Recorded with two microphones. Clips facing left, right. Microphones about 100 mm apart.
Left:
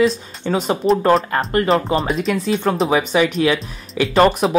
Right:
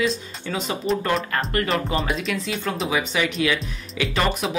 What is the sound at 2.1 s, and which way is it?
Speech, 45° left (ahead or behind).